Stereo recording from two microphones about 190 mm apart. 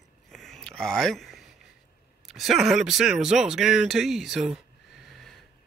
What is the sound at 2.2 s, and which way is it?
Speech, centre (ahead or behind).